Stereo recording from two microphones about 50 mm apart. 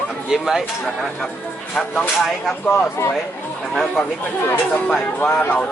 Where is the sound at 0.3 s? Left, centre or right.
Centre.